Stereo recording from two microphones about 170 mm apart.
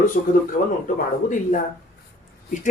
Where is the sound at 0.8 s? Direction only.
50° left (ahead or behind).